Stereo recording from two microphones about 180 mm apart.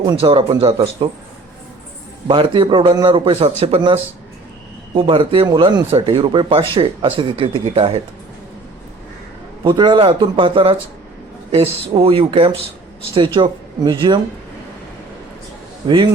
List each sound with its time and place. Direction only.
0.0 s speech: 25° right (ahead or behind)
2.2 s speech: 25° right (ahead or behind)
9.6 s speech: 25° right (ahead or behind)